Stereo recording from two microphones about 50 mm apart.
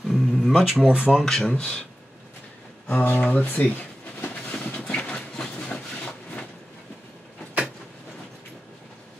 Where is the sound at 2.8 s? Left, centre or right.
Left.